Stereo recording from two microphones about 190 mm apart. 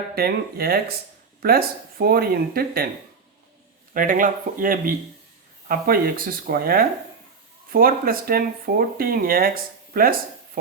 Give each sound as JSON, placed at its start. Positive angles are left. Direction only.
{"t": 0.2, "sound": "speech", "side_deg": -55}
{"t": 3.9, "sound": "speech", "side_deg": -45}